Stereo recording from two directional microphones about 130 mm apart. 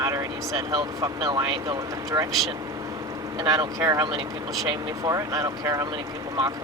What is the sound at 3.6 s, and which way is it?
Speech, 25° right (ahead or behind).